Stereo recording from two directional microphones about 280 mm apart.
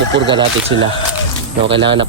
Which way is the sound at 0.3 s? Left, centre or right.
Centre.